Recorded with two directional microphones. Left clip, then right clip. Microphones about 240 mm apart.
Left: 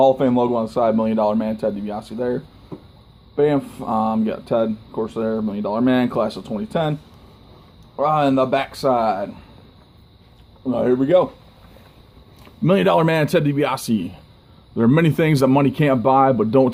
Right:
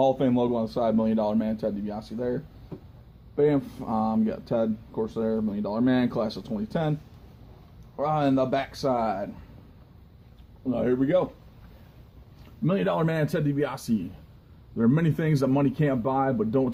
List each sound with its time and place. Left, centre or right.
0.0 s speech: centre
7.9 s speech: centre
10.7 s speech: centre
12.6 s speech: left